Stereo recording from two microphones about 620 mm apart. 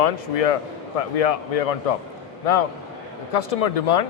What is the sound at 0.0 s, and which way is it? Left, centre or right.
A man's voice, left.